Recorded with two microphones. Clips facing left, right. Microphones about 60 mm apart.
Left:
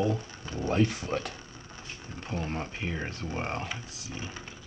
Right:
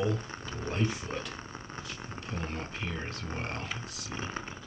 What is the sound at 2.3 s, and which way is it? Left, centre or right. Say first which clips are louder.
Speech: left 4 dB; left.